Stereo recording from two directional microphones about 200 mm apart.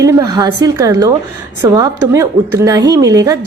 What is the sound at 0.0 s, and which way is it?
A woman's voice, 15° right (ahead or behind).